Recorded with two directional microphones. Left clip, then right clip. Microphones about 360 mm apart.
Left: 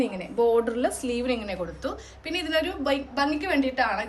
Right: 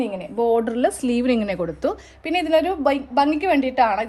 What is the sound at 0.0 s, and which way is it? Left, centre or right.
A woman's voice, centre.